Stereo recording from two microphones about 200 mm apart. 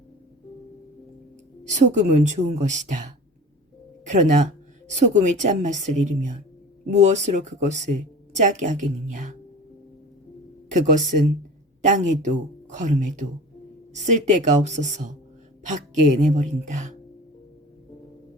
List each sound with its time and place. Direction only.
1.6 s speech: 35° right (ahead or behind)
10.7 s speech: 40° right (ahead or behind)
16.2 s speech: 35° right (ahead or behind)